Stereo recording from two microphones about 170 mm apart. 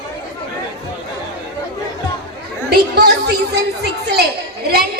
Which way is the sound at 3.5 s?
70° right (ahead or behind).